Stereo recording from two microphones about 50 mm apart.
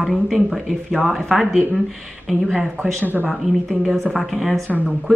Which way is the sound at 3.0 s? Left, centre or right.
Right.